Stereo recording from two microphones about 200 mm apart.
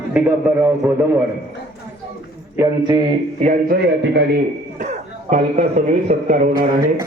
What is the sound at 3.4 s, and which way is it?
A man's voice, 45° right (ahead or behind).